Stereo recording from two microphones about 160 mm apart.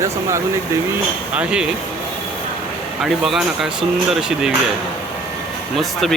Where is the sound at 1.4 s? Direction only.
5° right (ahead or behind).